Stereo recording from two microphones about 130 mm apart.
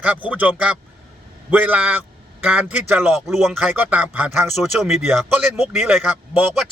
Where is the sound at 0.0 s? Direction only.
10° right (ahead or behind).